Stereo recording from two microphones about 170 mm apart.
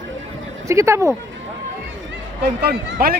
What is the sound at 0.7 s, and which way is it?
Speech, 15° right (ahead or behind).